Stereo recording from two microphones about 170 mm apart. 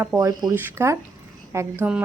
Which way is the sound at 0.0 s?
15° right (ahead or behind).